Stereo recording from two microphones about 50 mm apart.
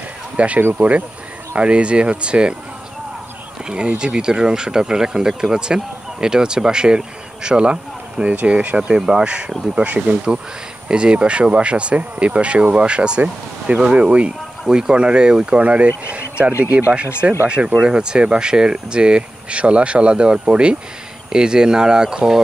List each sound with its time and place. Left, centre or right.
0.4 s speech: right
3.6 s speech: centre
16.4 s speech: right
17.5 s speech: right